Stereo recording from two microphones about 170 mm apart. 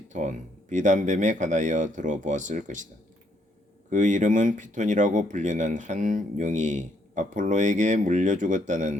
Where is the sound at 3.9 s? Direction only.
45° right (ahead or behind).